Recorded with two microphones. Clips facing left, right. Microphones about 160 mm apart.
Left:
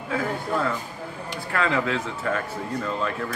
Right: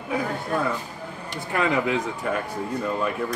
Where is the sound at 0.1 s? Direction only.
15° right (ahead or behind).